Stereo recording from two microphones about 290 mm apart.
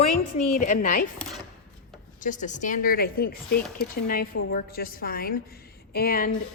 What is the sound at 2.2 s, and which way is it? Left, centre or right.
A woman's voice, left.